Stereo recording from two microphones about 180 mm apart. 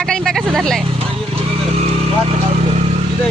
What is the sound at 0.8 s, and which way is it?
Vehicle, 30° right (ahead or behind).